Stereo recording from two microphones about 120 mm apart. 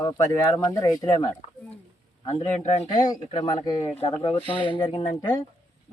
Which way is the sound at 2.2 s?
50° left (ahead or behind).